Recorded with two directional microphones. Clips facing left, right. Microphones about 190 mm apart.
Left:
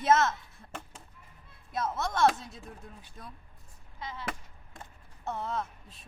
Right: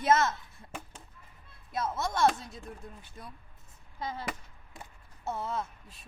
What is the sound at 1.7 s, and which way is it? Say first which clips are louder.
Speech: even; centre (ahead or behind).